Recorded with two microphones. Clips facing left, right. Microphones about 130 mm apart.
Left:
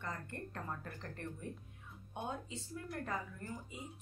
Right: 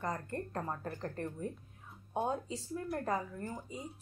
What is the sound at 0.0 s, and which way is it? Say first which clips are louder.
A woman's voice: right 7 dB; 40° right (ahead or behind).